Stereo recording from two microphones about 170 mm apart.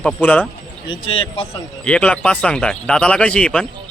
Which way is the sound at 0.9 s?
35° left (ahead or behind).